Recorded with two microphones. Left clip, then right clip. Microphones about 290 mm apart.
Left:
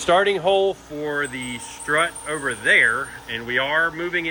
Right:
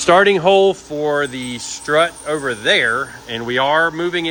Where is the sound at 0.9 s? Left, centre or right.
Centre.